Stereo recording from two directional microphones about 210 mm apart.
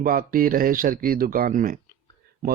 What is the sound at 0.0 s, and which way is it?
A man's voice, 45° right (ahead or behind).